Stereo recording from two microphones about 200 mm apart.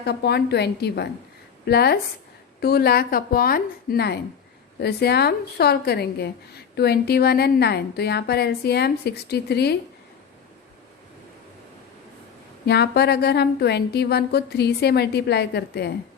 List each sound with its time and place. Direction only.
0.0 s a woman's voice: 55° left (ahead or behind)
12.6 s a woman's voice: 55° left (ahead or behind)